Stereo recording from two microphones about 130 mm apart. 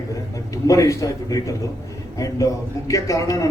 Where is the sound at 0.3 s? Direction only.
25° left (ahead or behind).